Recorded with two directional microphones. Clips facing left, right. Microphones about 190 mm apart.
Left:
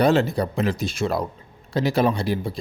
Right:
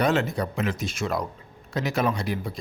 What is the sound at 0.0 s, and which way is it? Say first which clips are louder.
Speech: left 5 dB; 35° left (ahead or behind).